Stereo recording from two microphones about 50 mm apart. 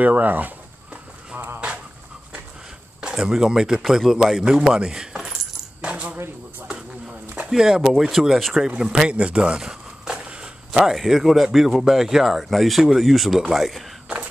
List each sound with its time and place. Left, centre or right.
0.0 s speech: right
3.2 s speech: centre
5.8 s coin: right
6.7 s a sound: right
7.4 s speech: centre
8.5 s speech: centre
9.1 s walk: right
10.9 s speech: centre
13.4 s speech: centre
14.0 s a sound: right